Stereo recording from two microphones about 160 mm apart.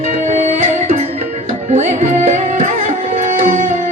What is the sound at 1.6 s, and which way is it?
Tabla, 45° right (ahead or behind).